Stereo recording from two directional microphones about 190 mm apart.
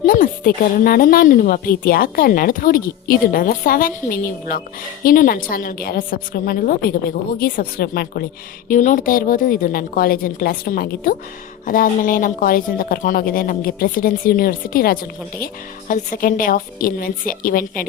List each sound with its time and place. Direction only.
0.0 s a woman's voice: 50° left (ahead or behind)